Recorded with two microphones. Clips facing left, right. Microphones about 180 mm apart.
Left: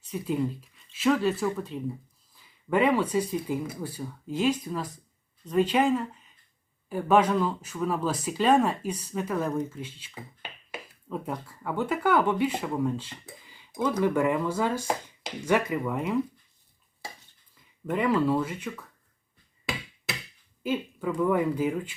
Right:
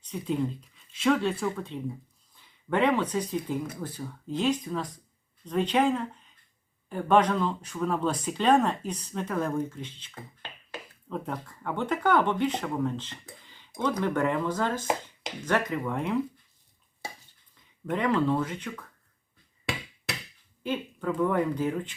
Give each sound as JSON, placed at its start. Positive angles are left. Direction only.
{"t": 0.1, "sound": "speech", "side_deg": 5}
{"t": 17.8, "sound": "speech", "side_deg": 5}
{"t": 19.7, "sound": "a sound", "side_deg": 0}
{"t": 20.1, "sound": "finger snapping", "side_deg": 0}
{"t": 21.2, "sound": "speech", "side_deg": 5}